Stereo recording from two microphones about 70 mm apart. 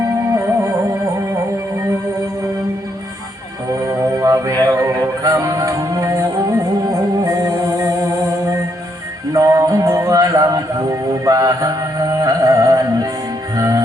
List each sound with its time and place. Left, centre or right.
0.3 s music: right
3.8 s music: right